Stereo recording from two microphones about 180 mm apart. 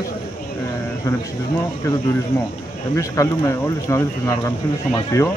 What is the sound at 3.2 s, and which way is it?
Speech, 20° left (ahead or behind).